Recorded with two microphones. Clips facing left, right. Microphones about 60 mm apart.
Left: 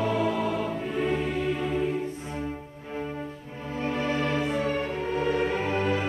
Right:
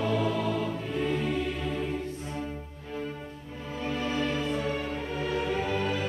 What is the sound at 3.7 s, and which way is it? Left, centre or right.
Music, left.